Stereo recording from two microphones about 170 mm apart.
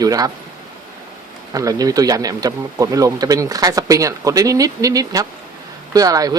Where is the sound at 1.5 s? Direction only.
20° right (ahead or behind).